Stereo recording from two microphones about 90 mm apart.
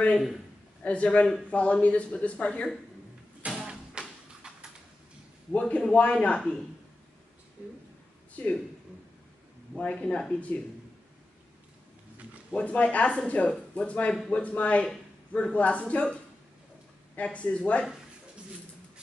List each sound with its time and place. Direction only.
0.8 s speech: 15° left (ahead or behind)
3.4 s music: 5° right (ahead or behind)
5.5 s speech: 10° left (ahead or behind)
9.8 s speech: 10° left (ahead or behind)
12.5 s speech: 15° left (ahead or behind)